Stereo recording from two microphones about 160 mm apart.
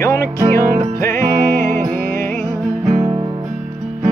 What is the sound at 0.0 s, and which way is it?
Music, 15° left (ahead or behind).